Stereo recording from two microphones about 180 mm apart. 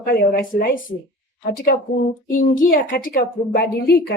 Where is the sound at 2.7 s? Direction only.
50° left (ahead or behind).